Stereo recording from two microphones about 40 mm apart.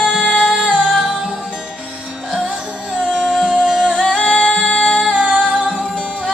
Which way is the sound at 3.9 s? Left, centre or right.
Left.